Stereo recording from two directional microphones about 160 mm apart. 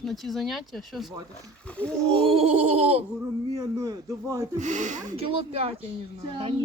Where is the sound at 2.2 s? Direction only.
35° right (ahead or behind).